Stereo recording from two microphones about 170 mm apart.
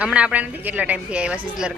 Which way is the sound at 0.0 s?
5° right (ahead or behind).